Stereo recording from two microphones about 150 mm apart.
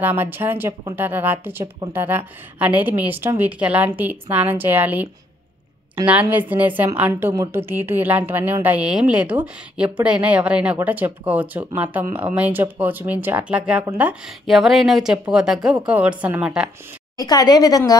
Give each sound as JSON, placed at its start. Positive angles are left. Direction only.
{"t": 0.0, "sound": "a woman's voice", "side_deg": -10}
{"t": 6.0, "sound": "a woman's voice", "side_deg": -10}
{"t": 17.2, "sound": "a woman's voice", "side_deg": 25}